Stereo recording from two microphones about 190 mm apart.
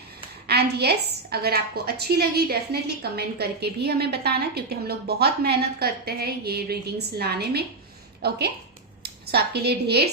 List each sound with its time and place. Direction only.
0.4 s a woman's voice: 60° right (ahead or behind)